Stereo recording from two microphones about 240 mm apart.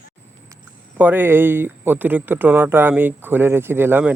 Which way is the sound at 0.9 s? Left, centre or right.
Centre.